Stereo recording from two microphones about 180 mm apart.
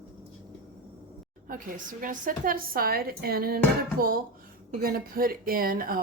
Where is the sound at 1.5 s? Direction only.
50° right (ahead or behind).